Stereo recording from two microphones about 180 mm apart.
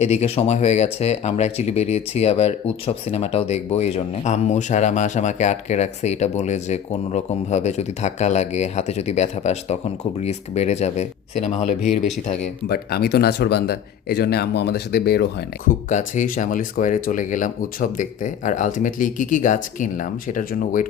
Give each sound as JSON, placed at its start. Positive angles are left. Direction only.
{"t": 0.0, "sound": "speech", "side_deg": 35}
{"t": 12.6, "sound": "speech", "side_deg": 60}
{"t": 15.9, "sound": "speech", "side_deg": 40}